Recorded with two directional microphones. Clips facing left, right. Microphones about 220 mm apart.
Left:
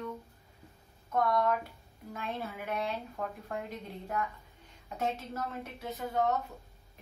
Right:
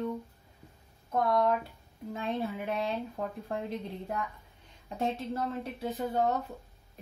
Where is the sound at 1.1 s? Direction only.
25° right (ahead or behind).